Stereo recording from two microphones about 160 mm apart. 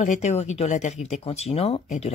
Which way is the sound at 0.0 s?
45° left (ahead or behind).